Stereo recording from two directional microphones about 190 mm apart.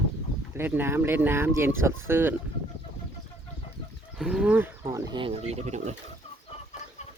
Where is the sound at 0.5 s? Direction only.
10° right (ahead or behind).